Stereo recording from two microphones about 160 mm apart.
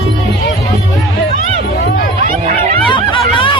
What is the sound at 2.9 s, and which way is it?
Snicker, 30° left (ahead or behind).